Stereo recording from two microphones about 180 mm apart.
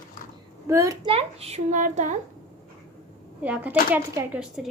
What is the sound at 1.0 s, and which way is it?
A child's voice, 35° right (ahead or behind).